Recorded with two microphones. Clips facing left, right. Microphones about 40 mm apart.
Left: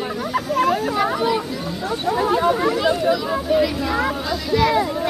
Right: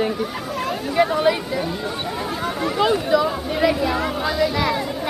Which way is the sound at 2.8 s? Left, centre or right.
Centre.